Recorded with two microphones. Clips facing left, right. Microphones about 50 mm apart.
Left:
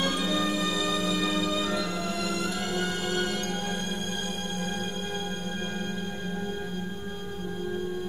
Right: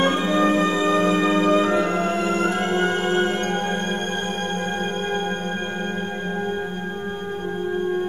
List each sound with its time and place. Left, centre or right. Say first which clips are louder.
0.0 s music: right 9 dB; right